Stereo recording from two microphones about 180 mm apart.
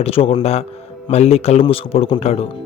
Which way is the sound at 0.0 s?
30° left (ahead or behind).